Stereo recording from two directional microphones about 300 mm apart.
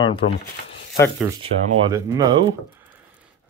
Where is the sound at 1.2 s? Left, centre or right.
Centre.